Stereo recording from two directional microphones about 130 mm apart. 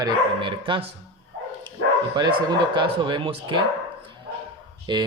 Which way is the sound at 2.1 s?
35° right (ahead or behind).